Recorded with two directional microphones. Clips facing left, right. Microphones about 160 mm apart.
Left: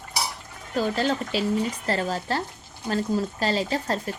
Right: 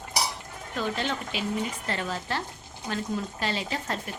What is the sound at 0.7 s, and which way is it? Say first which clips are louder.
Dishes: left 6 dB; 40° left (ahead or behind).